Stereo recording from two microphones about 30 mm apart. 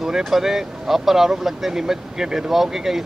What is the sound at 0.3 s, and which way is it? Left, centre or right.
Speech, centre.